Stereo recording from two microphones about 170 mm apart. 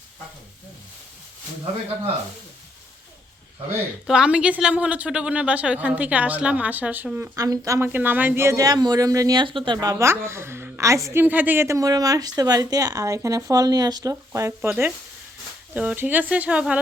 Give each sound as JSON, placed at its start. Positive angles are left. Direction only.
{"t": 4.0, "sound": "speech", "side_deg": -5}
{"t": 9.8, "sound": "speech", "side_deg": -20}